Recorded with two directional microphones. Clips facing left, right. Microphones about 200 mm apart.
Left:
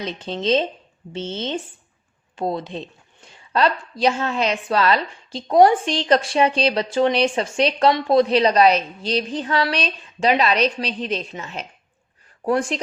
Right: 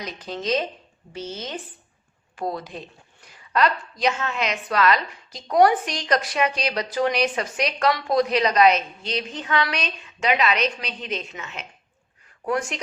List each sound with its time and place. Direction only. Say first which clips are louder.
0.0 s a woman's voice: left 5 dB; 25° left (ahead or behind)